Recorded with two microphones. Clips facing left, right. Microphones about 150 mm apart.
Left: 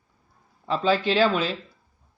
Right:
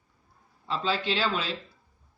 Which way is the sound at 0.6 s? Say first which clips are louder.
Left 6 dB; 50° left (ahead or behind).